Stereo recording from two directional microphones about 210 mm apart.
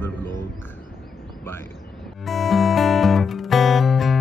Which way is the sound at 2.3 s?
Centre (ahead or behind).